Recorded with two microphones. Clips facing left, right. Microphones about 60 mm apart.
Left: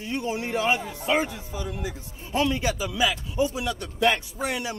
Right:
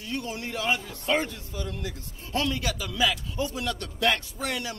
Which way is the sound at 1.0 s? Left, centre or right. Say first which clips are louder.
Left 1 dB; centre.